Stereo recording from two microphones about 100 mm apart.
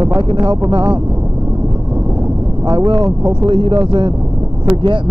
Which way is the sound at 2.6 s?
45° right (ahead or behind).